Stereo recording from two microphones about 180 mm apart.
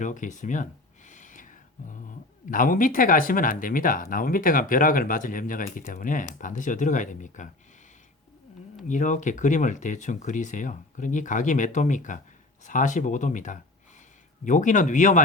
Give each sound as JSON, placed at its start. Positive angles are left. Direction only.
{"t": 0.0, "sound": "a sound", "side_deg": 45}
{"t": 2.5, "sound": "speech", "side_deg": 50}
{"t": 8.9, "sound": "speech", "side_deg": 45}